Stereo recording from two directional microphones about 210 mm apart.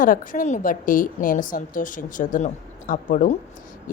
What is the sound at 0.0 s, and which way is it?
A woman's voice, 40° left (ahead or behind).